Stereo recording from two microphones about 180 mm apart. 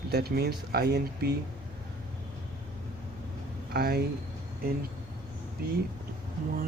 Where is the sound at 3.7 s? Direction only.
60° right (ahead or behind).